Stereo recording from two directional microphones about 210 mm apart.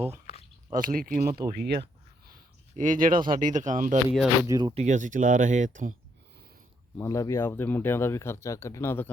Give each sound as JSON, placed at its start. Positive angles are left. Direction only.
{"t": 0.7, "sound": "speech", "side_deg": -40}
{"t": 2.3, "sound": "speech", "side_deg": -35}
{"t": 4.4, "sound": "speech", "side_deg": -20}
{"t": 6.9, "sound": "speech", "side_deg": 15}